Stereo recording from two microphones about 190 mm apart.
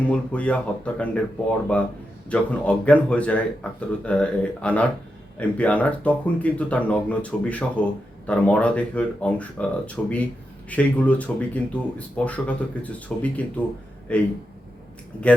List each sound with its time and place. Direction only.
0.0 s speech: 5° left (ahead or behind)